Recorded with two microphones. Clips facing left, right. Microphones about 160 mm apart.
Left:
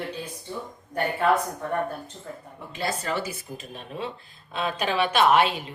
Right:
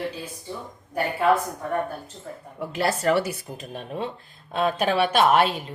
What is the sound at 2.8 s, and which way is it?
Speech, 70° right (ahead or behind).